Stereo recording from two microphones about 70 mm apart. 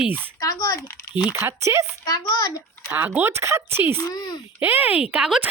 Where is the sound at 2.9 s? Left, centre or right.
Right.